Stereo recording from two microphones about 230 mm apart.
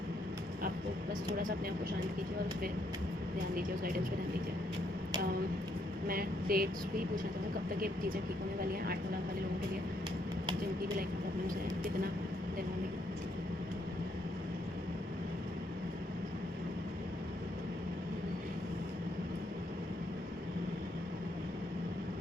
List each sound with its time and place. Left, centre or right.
6.1 s speech: right